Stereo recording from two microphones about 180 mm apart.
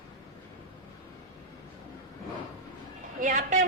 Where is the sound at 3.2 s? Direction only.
45° right (ahead or behind).